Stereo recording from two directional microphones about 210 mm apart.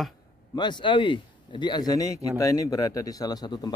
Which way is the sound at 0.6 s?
20° left (ahead or behind).